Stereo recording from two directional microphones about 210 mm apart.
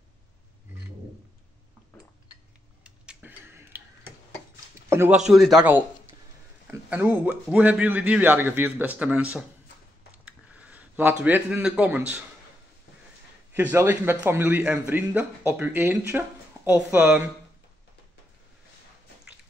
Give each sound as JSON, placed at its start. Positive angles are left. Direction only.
{"t": 2.8, "sound": "tick-tock", "side_deg": -5}
{"t": 4.8, "sound": "a man's voice", "side_deg": -10}
{"t": 10.2, "sound": "speech", "side_deg": -5}
{"t": 13.5, "sound": "a man's voice", "side_deg": -10}